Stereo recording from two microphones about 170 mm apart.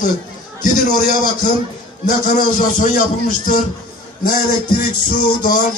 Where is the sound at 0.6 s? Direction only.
55° left (ahead or behind).